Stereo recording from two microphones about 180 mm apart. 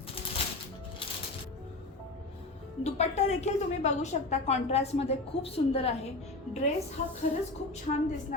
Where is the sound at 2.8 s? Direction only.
35° left (ahead or behind).